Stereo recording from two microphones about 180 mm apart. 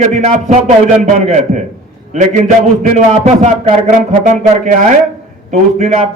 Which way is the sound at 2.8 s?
40° right (ahead or behind).